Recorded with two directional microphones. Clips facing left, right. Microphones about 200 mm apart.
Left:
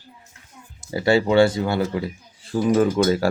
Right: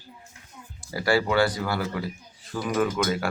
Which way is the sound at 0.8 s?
25° left (ahead or behind).